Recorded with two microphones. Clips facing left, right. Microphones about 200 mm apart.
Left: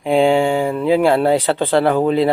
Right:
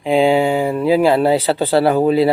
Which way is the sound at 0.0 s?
Centre (ahead or behind).